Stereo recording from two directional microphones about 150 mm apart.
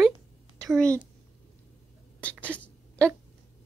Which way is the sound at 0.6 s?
5° left (ahead or behind).